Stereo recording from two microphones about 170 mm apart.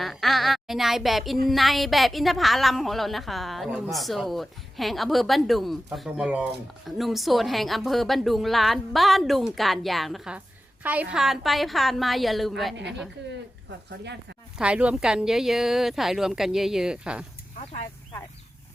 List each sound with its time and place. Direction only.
0.0 s a woman's voice: centre (ahead or behind)
12.7 s speech: 90° right
14.6 s a woman's voice: 5° right (ahead or behind)